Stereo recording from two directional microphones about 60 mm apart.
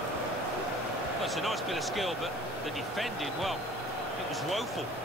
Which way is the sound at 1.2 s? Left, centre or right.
Centre.